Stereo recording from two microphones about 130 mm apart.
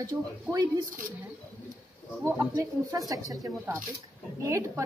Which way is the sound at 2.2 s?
15° right (ahead or behind).